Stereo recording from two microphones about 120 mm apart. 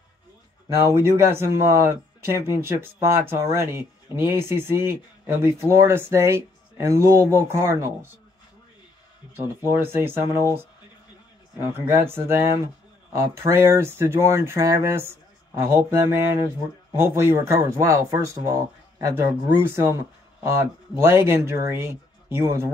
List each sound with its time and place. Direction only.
0.7 s speech: 25° right (ahead or behind)
9.3 s speech: 20° right (ahead or behind)
11.8 s speech: 20° right (ahead or behind)